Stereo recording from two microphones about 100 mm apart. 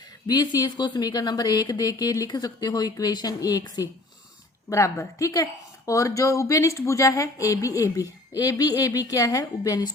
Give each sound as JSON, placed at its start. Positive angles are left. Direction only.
{"t": 0.3, "sound": "speech", "side_deg": 45}
{"t": 4.7, "sound": "speech", "side_deg": 30}